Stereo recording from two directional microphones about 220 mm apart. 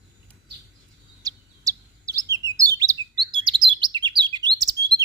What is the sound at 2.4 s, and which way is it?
Chirp, 15° right (ahead or behind).